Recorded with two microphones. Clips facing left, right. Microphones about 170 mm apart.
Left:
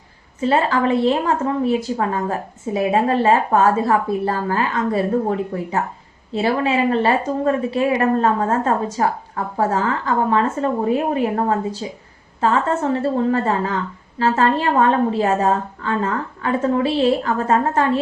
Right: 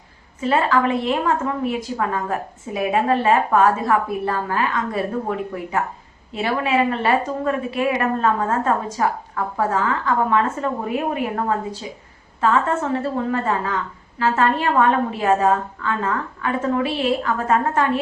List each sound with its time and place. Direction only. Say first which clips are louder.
0.4 s a woman's voice: left 1 dB; 35° left (ahead or behind)